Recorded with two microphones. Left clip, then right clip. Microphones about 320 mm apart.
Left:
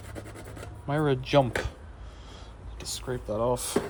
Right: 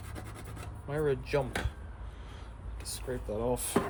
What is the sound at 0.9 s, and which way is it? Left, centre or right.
Speech, left.